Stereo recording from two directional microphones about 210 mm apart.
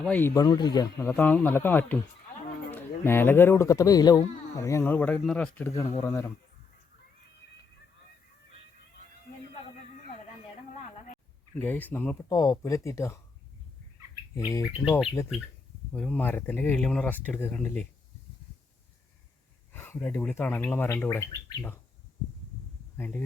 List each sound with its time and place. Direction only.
0.0 s a man's voice: 10° left (ahead or behind)
6.0 s speech: 15° left (ahead or behind)
11.6 s speech: 10° left (ahead or behind)
14.3 s speech: 15° left (ahead or behind)
14.8 s speech: centre (ahead or behind)
19.7 s speech: 10° left (ahead or behind)
23.0 s speech: 10° left (ahead or behind)